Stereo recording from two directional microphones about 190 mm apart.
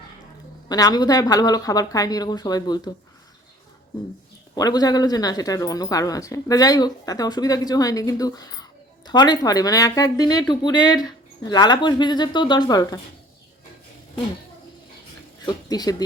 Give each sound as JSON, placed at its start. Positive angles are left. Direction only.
{"t": 0.7, "sound": "speech", "side_deg": 20}
{"t": 4.5, "sound": "speech", "side_deg": 20}
{"t": 15.4, "sound": "speech", "side_deg": 20}